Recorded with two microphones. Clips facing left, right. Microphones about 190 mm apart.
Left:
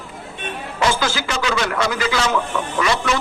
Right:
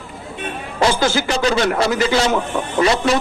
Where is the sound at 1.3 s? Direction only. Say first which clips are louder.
Right 5 dB; 35° right (ahead or behind).